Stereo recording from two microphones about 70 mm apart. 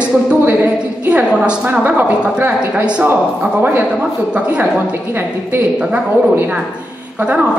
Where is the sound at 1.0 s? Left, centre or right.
Centre.